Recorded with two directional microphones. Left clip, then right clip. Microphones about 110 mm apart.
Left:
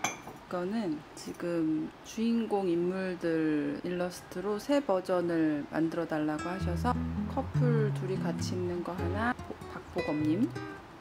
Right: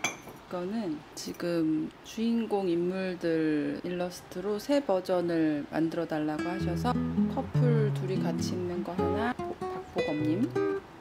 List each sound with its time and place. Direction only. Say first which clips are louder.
0.0 s cutlery: right 1 dB; 5° left (ahead or behind)
1.4 s speech: right 2 dB; 15° right (ahead or behind)
2.1 s speech: right 1 dB; 5° right (ahead or behind)